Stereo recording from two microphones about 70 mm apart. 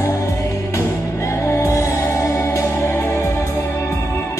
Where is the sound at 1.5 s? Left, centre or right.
Left.